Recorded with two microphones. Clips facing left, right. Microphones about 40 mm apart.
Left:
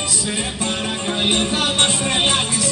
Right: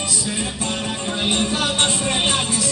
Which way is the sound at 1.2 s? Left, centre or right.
Left.